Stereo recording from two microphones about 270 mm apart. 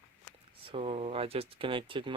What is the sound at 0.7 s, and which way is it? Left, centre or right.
Speech, right.